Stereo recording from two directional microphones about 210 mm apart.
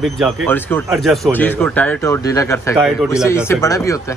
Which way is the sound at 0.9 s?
Centre (ahead or behind).